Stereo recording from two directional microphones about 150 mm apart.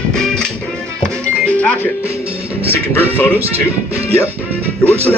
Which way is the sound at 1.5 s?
10° left (ahead or behind).